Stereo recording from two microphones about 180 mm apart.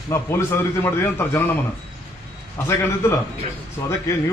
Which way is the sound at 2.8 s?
15° left (ahead or behind).